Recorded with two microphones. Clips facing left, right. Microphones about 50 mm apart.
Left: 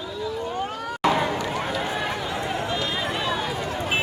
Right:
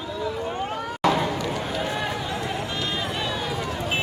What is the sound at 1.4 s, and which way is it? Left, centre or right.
Run, left.